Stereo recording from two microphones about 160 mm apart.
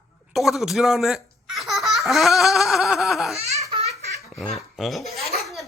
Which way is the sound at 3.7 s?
40° right (ahead or behind).